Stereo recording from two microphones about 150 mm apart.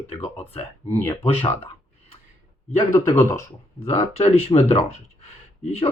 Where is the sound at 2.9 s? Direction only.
15° left (ahead or behind).